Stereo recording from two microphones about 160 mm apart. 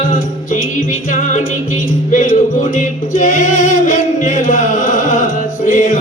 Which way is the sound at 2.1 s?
55° left (ahead or behind).